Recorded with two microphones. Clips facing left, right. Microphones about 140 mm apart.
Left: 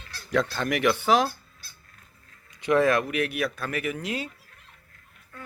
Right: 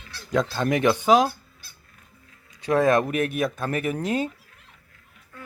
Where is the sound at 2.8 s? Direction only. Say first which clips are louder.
Right 4 dB; 20° right (ahead or behind).